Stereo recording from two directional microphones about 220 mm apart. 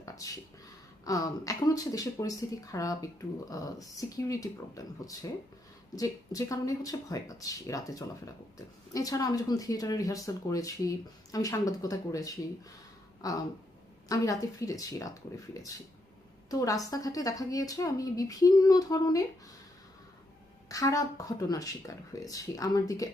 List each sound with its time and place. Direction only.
0.0 s a sound: 15° left (ahead or behind)
1.0 s speech: 15° left (ahead or behind)
20.7 s speech: 15° left (ahead or behind)